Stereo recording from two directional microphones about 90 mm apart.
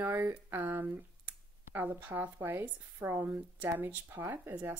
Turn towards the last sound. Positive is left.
turn(degrees=-25)  # may be behind; listen again after turning